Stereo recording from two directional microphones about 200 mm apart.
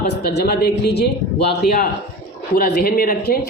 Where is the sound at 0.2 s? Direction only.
55° left (ahead or behind).